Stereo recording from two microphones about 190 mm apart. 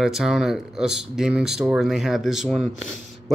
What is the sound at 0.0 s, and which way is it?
Speech, centre (ahead or behind).